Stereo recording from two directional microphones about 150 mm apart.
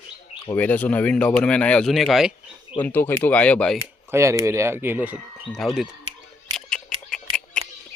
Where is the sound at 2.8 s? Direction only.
15° left (ahead or behind).